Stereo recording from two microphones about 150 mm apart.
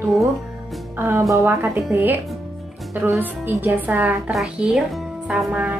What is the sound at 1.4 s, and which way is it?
A woman's voice, 15° right (ahead or behind).